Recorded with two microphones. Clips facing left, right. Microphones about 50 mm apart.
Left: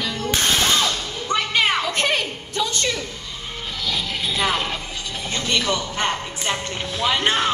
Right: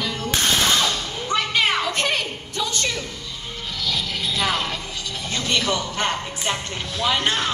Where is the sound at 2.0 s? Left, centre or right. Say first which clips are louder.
Left 2 dB; centre.